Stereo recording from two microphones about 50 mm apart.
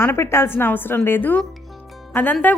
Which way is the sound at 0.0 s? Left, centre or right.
Left.